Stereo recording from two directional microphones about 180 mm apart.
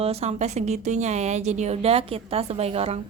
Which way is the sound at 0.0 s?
35° right (ahead or behind).